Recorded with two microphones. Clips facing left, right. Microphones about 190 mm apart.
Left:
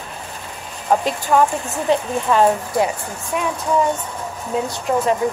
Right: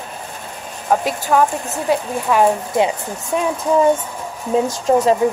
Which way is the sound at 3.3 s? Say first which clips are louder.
Right 3 dB; 30° right (ahead or behind).